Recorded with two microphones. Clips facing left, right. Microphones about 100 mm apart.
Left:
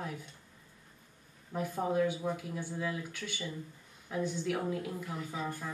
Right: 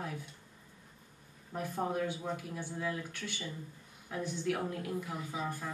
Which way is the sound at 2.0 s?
15° left (ahead or behind).